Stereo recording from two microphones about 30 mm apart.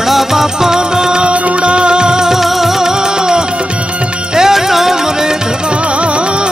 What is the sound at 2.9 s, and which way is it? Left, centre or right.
Music, right.